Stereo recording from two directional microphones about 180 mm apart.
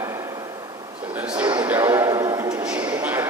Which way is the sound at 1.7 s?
15° right (ahead or behind).